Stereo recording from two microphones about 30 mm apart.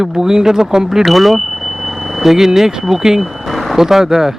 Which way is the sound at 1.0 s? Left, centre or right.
Centre.